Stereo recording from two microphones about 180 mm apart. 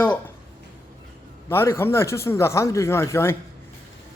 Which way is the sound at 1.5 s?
15° left (ahead or behind).